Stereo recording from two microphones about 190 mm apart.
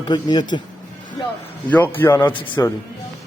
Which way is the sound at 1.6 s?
10° left (ahead or behind).